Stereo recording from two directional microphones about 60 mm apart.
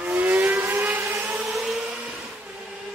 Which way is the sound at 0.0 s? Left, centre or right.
Right.